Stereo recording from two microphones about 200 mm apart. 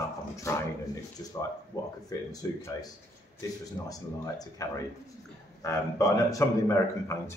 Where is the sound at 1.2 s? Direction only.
15° left (ahead or behind).